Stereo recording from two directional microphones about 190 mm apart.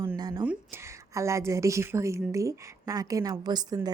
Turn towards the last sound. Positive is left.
turn(degrees=-20)  # may be behind; listen again after turning